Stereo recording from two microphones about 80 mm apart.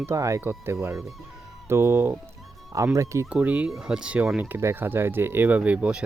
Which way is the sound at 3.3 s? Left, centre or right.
Centre.